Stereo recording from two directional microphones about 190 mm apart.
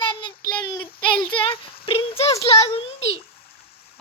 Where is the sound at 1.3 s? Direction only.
25° left (ahead or behind).